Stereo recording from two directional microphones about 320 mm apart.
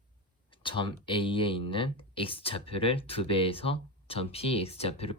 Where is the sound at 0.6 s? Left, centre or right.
Centre.